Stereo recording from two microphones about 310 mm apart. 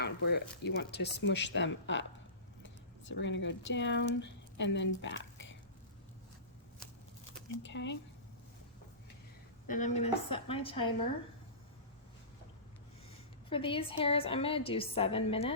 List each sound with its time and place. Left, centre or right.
0.0 s speech: left
7.6 s speech: left
9.6 s a woman's voice: left
13.5 s a woman's voice: centre